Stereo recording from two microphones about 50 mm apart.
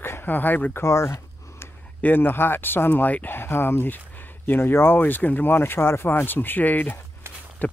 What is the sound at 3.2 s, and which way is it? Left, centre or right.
Speech, left.